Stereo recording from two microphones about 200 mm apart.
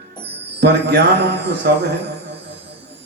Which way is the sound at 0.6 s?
55° right (ahead or behind).